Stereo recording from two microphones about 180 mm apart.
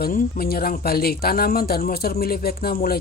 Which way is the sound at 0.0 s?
55° left (ahead or behind).